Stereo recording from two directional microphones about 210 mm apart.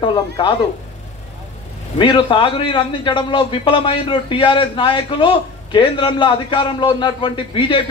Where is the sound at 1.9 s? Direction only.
20° left (ahead or behind).